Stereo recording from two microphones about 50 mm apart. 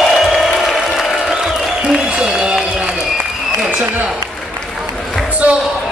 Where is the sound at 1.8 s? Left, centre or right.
Centre.